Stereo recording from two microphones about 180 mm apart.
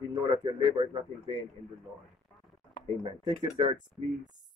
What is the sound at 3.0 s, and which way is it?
Speech, 25° right (ahead or behind).